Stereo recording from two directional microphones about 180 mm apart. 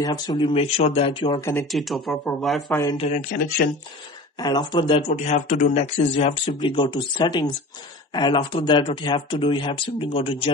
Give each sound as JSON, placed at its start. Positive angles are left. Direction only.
{"t": 0.0, "sound": "speech", "side_deg": 20}
{"t": 1.4, "sound": "speech", "side_deg": 15}
{"t": 1.7, "sound": "speech", "side_deg": 0}
{"t": 2.7, "sound": "speech", "side_deg": 15}
{"t": 3.2, "sound": "speech", "side_deg": 55}
{"t": 4.4, "sound": "speech", "side_deg": 25}
{"t": 5.0, "sound": "speech", "side_deg": 40}